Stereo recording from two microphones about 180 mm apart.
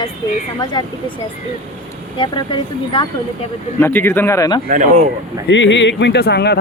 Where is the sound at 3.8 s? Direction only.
10° left (ahead or behind).